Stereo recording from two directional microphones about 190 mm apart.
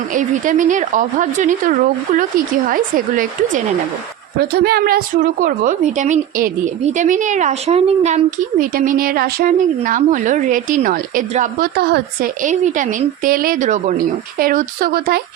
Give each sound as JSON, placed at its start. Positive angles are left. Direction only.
{"t": 0.1, "sound": "a woman's voice", "side_deg": -45}